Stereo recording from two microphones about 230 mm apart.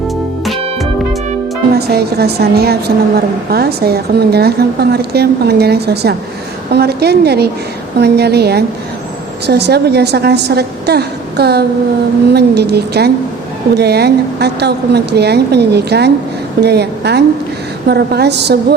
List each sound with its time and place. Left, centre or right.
1.7 s a woman's voice: right